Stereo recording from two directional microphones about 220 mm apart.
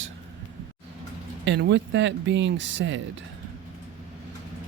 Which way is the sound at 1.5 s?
55° right (ahead or behind).